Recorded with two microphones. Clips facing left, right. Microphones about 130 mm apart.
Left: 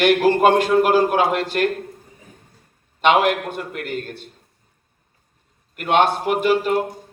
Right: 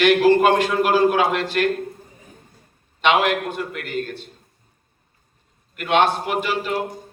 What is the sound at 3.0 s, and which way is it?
A man's voice, 50° left (ahead or behind).